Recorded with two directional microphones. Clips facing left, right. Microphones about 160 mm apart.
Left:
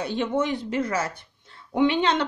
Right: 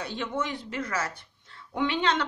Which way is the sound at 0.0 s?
20° left (ahead or behind).